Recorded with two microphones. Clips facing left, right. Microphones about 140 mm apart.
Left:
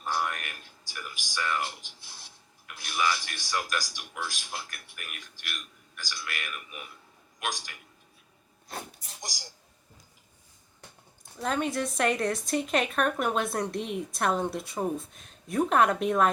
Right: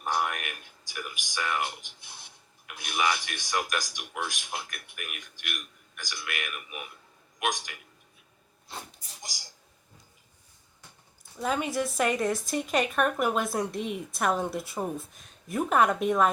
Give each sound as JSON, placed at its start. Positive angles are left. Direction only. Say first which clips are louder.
{"t": 0.0, "sound": "a sound", "louder": "right 2 dB", "side_deg": -15}
{"t": 2.6, "sound": "a man's voice", "louder": "right 1 dB", "side_deg": -15}
{"t": 11.3, "sound": "speech", "louder": "even", "side_deg": -5}